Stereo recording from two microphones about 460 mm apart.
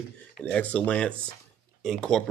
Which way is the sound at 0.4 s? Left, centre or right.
Centre.